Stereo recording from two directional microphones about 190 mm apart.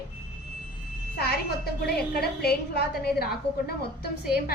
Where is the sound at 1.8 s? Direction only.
55° left (ahead or behind).